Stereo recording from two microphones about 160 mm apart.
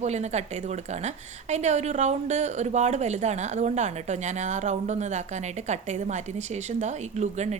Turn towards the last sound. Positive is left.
turn(degrees=-45)  # may be behind; listen again after turning